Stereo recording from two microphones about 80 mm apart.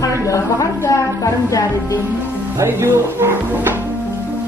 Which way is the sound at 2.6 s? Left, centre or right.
Right.